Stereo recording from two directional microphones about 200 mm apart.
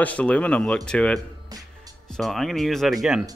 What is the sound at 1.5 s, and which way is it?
Music, 20° right (ahead or behind).